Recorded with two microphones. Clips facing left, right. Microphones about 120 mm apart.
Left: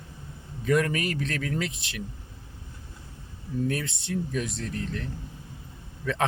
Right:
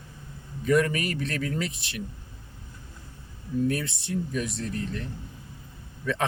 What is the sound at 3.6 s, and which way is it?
A man's voice, centre (ahead or behind).